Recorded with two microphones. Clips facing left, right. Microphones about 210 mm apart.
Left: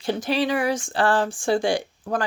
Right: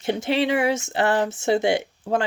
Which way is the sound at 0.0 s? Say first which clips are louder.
Right 1 dB; 25° right (ahead or behind).